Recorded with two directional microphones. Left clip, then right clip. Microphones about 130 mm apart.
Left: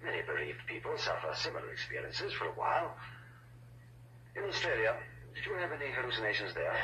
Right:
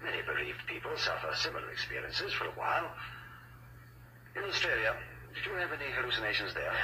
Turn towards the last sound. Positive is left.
turn(degrees=-25)  # may be behind; listen again after turning